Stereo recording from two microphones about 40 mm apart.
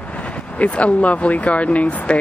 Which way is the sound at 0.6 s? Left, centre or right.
Left.